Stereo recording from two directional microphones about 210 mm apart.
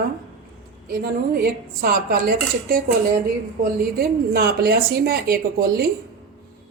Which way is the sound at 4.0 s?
45° right (ahead or behind).